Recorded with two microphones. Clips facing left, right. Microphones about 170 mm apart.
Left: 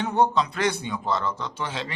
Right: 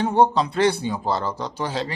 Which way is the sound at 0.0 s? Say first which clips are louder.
Right 4 dB; 30° right (ahead or behind).